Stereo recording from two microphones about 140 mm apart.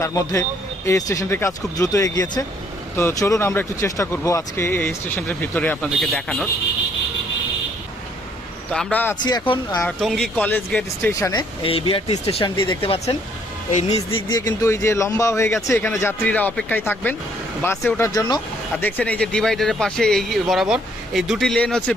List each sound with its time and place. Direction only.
0.0 s speech: 20° left (ahead or behind); by 6.5 s 5° left (ahead or behind)
8.7 s speech: 10° left (ahead or behind)
11.1 s speech: 25° left (ahead or behind)
11.6 s speech: 40° left (ahead or behind)
13.7 s speech: 60° left (ahead or behind)
14.1 s speech: 35° left (ahead or behind); by 18.1 s 15° left (ahead or behind)
18.1 s speech: 30° left (ahead or behind)
18.8 s speech: 10° left (ahead or behind)